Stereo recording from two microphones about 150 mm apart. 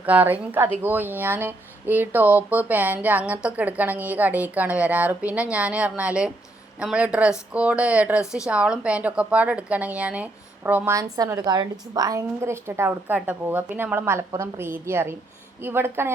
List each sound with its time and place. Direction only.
0.0 s speech: 10° right (ahead or behind)